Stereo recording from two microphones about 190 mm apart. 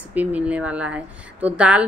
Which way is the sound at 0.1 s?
10° right (ahead or behind).